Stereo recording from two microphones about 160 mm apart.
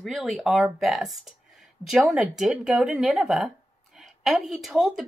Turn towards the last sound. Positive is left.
turn(degrees=0)  # may be behind; listen again after turning